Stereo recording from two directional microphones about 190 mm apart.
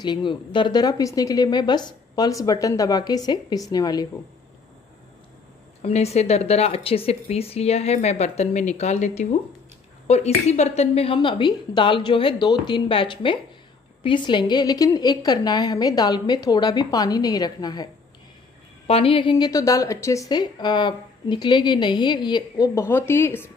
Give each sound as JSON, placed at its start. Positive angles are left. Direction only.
{"t": 0.0, "sound": "a woman's voice", "side_deg": 25}
{"t": 5.8, "sound": "a woman's voice", "side_deg": 35}
{"t": 18.9, "sound": "a woman's voice", "side_deg": 30}